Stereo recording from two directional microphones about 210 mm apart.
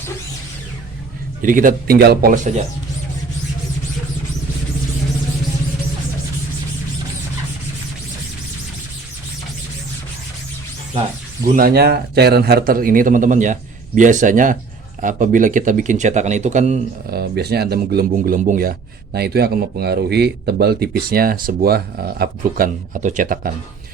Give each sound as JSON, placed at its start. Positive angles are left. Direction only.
{"t": 1.4, "sound": "a man's voice", "side_deg": -40}
{"t": 11.4, "sound": "a man's voice", "side_deg": -45}
{"t": 17.1, "sound": "speech", "side_deg": -50}